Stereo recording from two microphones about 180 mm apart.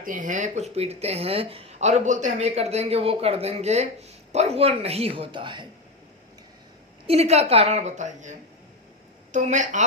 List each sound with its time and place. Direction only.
0.0 s speech: 50° right (ahead or behind); by 5.6 s 25° right (ahead or behind)
7.1 s a woman's voice: 35° right (ahead or behind)